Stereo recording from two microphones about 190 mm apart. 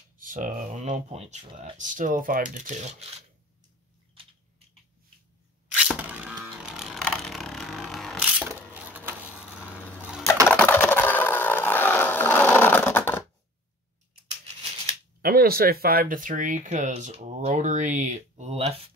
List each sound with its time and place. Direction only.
0.2 s speech: 45° right (ahead or behind)
5.7 s a sound: 5° right (ahead or behind)
10.5 s vehicle: 10° left (ahead or behind)
15.2 s speech: 55° right (ahead or behind); by 18.8 s 35° right (ahead or behind)